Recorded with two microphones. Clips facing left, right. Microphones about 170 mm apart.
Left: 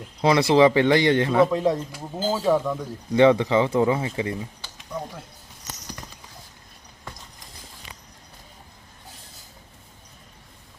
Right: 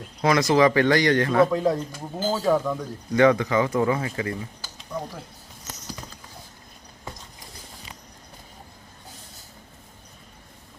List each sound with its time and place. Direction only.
0.2 s speech: 25° left (ahead or behind)
1.5 s speech: centre (ahead or behind)
3.2 s speech: 25° left (ahead or behind)
4.6 s a sound: centre (ahead or behind)